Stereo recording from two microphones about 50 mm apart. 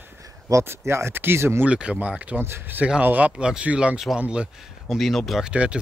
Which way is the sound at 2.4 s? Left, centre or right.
Right.